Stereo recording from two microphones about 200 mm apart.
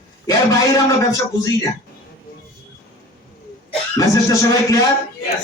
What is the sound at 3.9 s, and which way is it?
Speech, 15° left (ahead or behind).